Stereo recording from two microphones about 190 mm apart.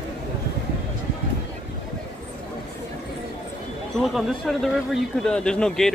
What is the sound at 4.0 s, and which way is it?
Speech, centre (ahead or behind).